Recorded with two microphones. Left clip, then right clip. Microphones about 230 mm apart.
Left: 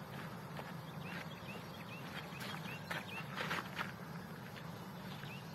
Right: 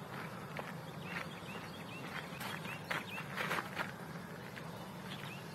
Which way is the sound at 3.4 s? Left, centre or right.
Centre.